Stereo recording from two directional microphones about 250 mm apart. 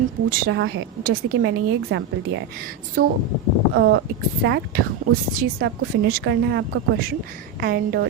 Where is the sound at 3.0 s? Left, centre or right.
Right.